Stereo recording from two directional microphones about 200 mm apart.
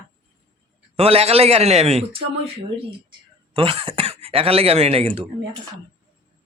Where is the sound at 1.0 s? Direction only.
30° right (ahead or behind).